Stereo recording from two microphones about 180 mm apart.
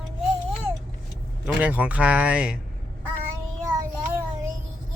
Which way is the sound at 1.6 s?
10° right (ahead or behind).